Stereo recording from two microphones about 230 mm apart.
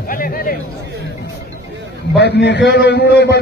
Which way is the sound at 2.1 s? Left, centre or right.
Left.